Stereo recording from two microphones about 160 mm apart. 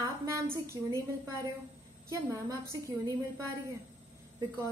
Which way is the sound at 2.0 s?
20° right (ahead or behind).